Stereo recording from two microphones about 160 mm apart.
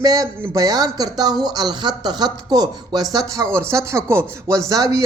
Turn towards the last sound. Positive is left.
turn(degrees=-20)  # may be behind; listen again after turning